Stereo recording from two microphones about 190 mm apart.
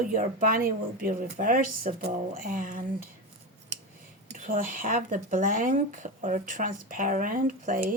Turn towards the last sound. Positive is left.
turn(degrees=-45)  # may be behind; listen again after turning